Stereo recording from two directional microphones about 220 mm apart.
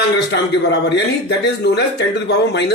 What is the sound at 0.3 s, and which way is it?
A man's voice, 55° left (ahead or behind).